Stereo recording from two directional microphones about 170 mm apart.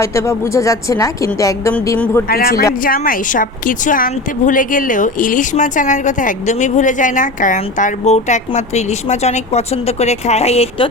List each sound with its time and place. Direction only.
0.0 s a woman's voice: 15° left (ahead or behind)
2.2 s speech: 60° left (ahead or behind); by 10.8 s 35° left (ahead or behind)